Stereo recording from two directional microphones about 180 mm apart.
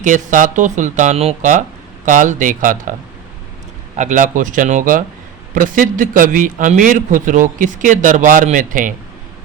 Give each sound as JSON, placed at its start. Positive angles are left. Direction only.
{"t": 0.0, "sound": "speech", "side_deg": -45}
{"t": 3.9, "sound": "speech", "side_deg": -40}